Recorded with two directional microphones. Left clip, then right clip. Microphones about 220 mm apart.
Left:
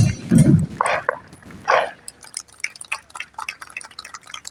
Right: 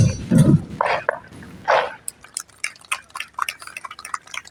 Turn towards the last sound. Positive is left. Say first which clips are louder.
# right 1 dB
turn(degrees=0)  # may be behind; listen again after turning